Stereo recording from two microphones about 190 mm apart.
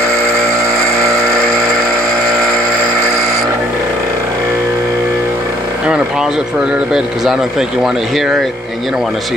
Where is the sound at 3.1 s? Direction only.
15° right (ahead or behind).